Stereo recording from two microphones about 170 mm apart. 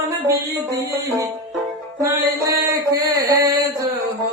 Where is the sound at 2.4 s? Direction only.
20° right (ahead or behind).